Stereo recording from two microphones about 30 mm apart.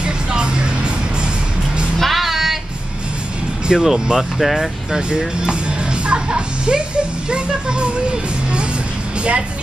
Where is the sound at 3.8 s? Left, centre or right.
Centre.